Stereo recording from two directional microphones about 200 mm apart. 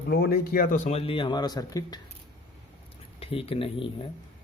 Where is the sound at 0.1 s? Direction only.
50° left (ahead or behind); by 2.0 s 20° left (ahead or behind).